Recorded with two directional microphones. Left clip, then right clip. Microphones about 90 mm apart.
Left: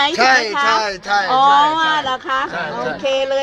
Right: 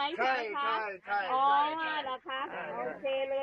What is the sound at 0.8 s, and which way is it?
Speech, 60° left (ahead or behind).